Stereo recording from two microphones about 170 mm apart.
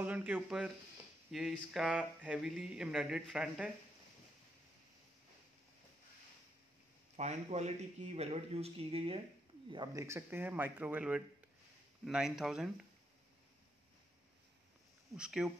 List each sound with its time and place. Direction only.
0.0 s speech: 10° right (ahead or behind)
7.2 s speech: 40° right (ahead or behind)
9.7 s speech: 25° right (ahead or behind); by 12.7 s centre (ahead or behind)
15.1 s speech: 5° right (ahead or behind)